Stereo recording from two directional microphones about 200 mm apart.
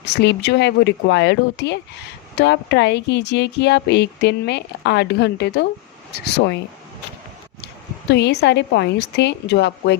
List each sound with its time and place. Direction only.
0.0 s speech: 60° left (ahead or behind)
7.6 s speech: 60° left (ahead or behind)